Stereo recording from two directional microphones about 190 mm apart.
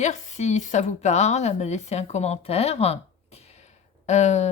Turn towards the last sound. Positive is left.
turn(degrees=35)  # may be behind; listen again after turning